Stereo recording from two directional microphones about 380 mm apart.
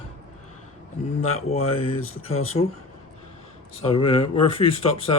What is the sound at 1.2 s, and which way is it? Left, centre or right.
Speech, centre.